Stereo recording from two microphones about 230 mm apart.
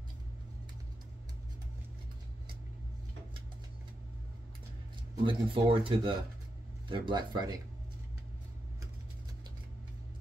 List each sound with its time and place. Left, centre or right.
5.2 s speech: right